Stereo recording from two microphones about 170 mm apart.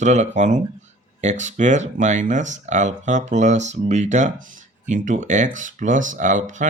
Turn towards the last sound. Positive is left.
turn(degrees=-50)  # may be behind; listen again after turning